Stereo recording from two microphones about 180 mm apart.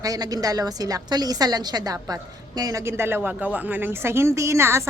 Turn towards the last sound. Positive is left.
turn(degrees=-15)  # may be behind; listen again after turning